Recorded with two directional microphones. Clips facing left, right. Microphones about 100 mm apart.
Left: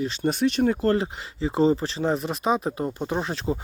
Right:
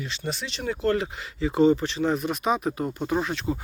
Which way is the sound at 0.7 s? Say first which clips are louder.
Left 2 dB; 35° left (ahead or behind).